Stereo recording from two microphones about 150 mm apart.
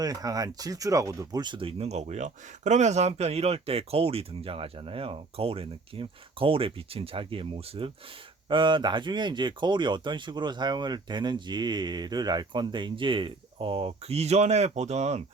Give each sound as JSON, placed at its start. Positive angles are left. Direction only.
{"t": 0.0, "sound": "speech", "side_deg": -25}